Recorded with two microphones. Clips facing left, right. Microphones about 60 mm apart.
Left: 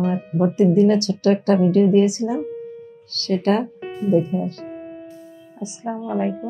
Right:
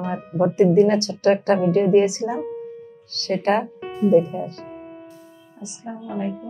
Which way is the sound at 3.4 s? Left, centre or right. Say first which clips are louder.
Right 1 dB; right.